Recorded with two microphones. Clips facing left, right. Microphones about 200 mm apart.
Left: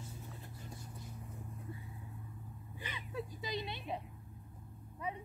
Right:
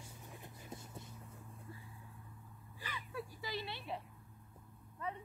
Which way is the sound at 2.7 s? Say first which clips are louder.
Left 2 dB; 20° left (ahead or behind).